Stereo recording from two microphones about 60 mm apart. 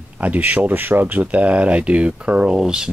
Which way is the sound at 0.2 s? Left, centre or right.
Right.